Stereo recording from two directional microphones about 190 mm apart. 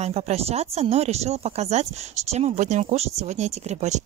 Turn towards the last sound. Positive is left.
turn(degrees=-35)  # may be behind; listen again after turning